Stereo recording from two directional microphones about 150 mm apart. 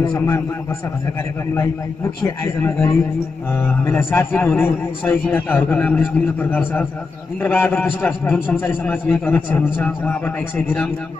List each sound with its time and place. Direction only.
2.2 s a man's voice: 20° left (ahead or behind)